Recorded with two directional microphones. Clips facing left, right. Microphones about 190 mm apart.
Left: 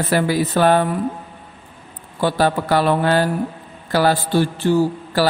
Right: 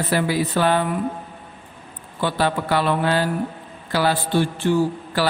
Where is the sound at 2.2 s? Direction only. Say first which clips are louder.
Left 4 dB; 40° left (ahead or behind).